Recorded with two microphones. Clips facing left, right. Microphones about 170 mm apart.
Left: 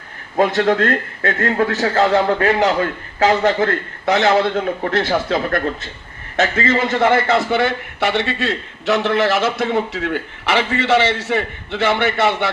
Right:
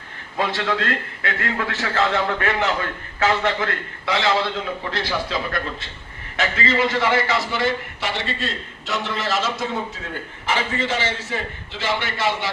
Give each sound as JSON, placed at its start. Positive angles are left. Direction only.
{"t": 0.3, "sound": "a man's voice", "side_deg": 45}